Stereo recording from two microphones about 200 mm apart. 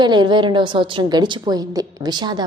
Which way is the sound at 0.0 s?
20° right (ahead or behind).